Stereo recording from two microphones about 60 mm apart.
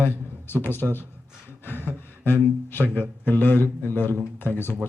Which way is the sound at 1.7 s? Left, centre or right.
Right.